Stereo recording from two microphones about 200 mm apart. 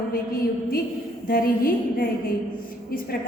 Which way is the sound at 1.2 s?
45° left (ahead or behind).